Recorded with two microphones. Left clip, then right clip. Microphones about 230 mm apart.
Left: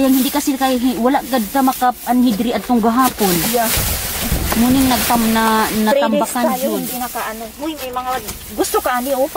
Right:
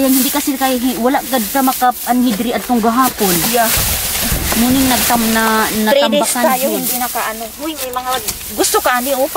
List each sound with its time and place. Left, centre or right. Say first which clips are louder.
0.0 s sizzle: right 1 dB; centre
4.8 s sizzle: right 2 dB; centre
8.5 s sizzle: right 3 dB; centre